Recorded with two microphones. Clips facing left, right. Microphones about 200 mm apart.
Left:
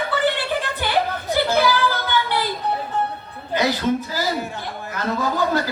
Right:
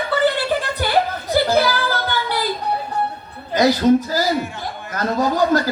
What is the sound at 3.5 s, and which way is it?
Speech, 40° right (ahead or behind).